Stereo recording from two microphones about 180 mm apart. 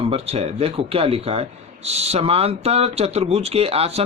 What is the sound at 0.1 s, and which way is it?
Speech, 35° right (ahead or behind).